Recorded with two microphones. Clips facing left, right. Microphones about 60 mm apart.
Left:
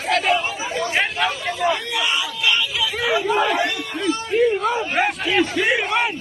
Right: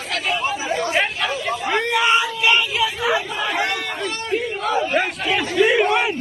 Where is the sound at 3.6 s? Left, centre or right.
Right.